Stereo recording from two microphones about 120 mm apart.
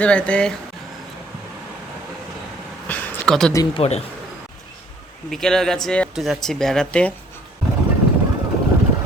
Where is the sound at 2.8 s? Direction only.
15° left (ahead or behind).